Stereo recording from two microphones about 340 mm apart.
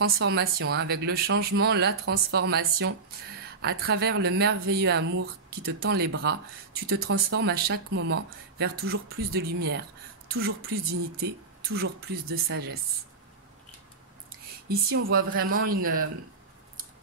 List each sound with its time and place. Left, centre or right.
0.0 s speech: right
11.7 s speech: right
15.0 s speech: right